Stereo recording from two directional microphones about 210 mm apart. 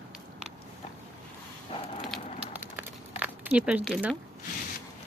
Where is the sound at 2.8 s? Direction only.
5° right (ahead or behind).